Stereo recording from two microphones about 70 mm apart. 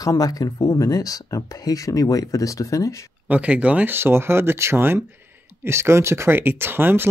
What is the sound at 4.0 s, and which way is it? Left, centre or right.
Speech, right.